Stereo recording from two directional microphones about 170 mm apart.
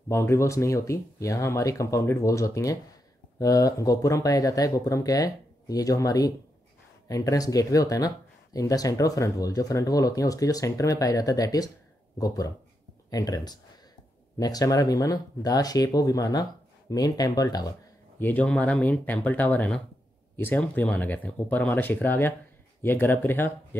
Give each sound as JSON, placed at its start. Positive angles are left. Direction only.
{"t": 0.1, "sound": "speech", "side_deg": 15}
{"t": 18.2, "sound": "speech", "side_deg": 10}